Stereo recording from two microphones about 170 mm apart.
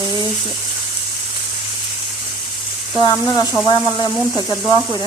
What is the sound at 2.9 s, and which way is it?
A woman's voice, 25° left (ahead or behind).